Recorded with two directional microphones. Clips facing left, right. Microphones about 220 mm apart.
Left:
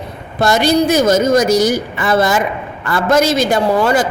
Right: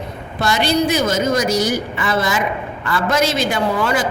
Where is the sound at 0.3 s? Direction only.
45° left (ahead or behind).